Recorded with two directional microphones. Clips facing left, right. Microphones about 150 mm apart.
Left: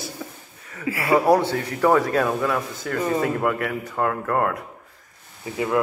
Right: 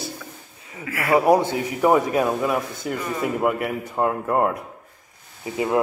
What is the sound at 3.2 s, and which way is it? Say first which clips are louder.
A man's voice: right 1 dB; 15° right (ahead or behind).